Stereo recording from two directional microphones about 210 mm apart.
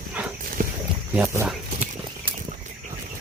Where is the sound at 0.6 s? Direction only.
40° right (ahead or behind).